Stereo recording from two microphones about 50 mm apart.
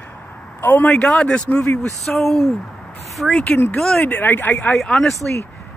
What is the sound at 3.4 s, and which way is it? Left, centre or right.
Speech, left.